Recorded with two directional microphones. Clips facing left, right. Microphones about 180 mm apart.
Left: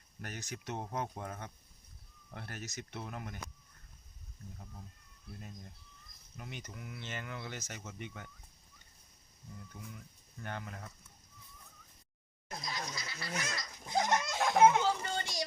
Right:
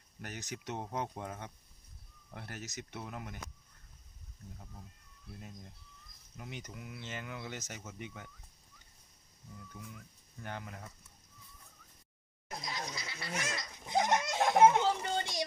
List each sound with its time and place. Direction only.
0.2 s speech: 15° right (ahead or behind)
6.3 s speech: 15° right (ahead or behind)
9.7 s speech: 10° right (ahead or behind)
12.5 s a child's voice: 20° right (ahead or behind)